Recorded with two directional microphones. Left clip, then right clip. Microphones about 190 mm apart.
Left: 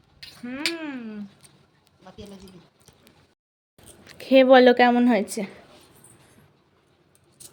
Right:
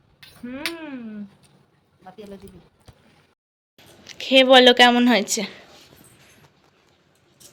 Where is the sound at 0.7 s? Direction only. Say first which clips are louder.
Left 1 dB; 10° left (ahead or behind).